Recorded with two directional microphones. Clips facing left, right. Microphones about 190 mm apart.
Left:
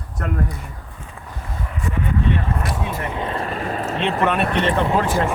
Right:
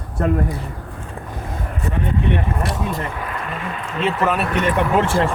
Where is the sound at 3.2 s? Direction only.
30° left (ahead or behind).